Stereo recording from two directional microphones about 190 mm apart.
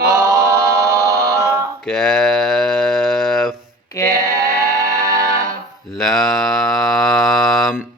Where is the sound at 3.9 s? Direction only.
15° left (ahead or behind).